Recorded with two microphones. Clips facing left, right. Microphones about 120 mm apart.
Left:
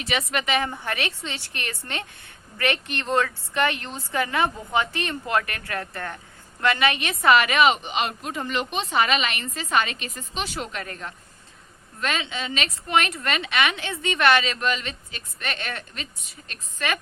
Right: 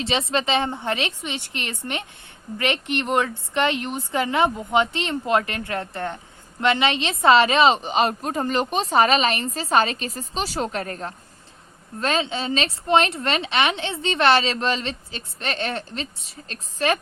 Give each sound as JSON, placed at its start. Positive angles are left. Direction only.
{"t": 0.0, "sound": "a woman's voice", "side_deg": -25}